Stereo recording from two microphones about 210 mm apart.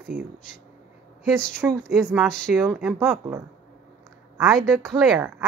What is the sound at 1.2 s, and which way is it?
A woman's voice, 5° left (ahead or behind).